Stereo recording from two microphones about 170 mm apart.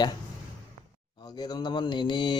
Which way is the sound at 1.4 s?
25° left (ahead or behind).